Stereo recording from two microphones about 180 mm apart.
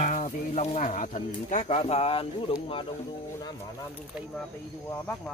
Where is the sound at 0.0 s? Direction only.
45° left (ahead or behind).